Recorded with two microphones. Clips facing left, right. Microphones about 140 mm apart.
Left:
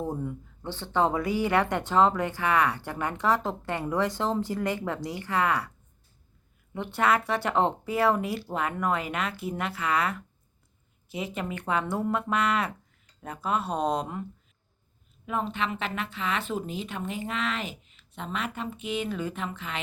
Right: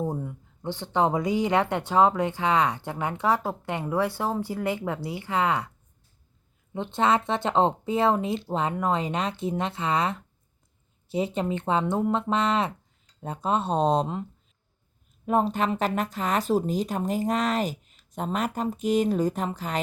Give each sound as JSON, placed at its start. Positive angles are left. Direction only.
{"t": 0.0, "sound": "speech", "side_deg": -15}
{"t": 6.7, "sound": "speech", "side_deg": -20}
{"t": 11.3, "sound": "speech", "side_deg": -25}
{"t": 15.3, "sound": "a woman's voice", "side_deg": -40}